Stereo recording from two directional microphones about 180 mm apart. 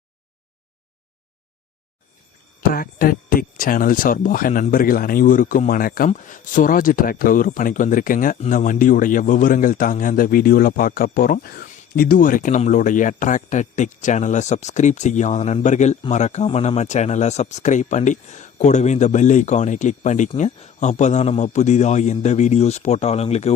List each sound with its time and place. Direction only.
2.7 s speech: 55° left (ahead or behind); by 23.5 s 35° left (ahead or behind)